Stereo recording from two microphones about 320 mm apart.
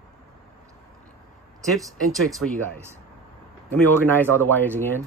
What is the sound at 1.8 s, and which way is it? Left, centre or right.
Speech, centre.